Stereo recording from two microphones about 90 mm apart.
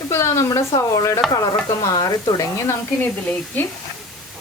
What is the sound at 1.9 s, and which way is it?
Speech, 45° left (ahead or behind).